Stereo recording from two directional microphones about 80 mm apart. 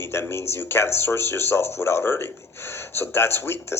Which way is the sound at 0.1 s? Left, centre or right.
Left.